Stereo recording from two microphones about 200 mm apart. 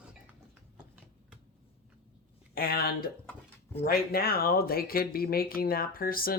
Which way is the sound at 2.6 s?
50° left (ahead or behind).